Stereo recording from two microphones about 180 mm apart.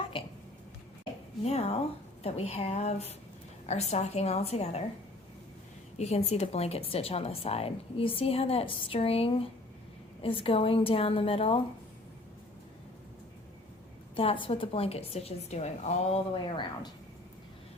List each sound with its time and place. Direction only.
0.1 s a sound: 30° left (ahead or behind)
1.5 s speech: 35° left (ahead or behind)
6.0 s speech: 35° left (ahead or behind)
14.2 s speech: 30° left (ahead or behind)